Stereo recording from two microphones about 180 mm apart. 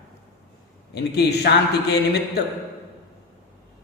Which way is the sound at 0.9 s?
65° left (ahead or behind).